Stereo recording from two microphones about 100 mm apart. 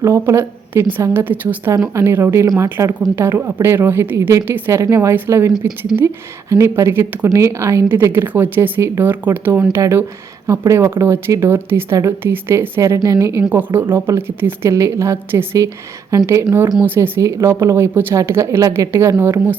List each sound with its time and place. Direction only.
0.0 s speech: 25° right (ahead or behind)
1.7 s speech: 30° right (ahead or behind)
6.5 s speech: 30° right (ahead or behind)
17.2 s speech: 30° right (ahead or behind)